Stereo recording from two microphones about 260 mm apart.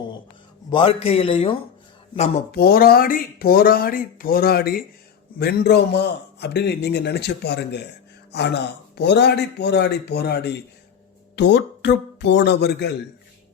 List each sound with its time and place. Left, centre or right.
0.7 s speech: centre
2.1 s speech: left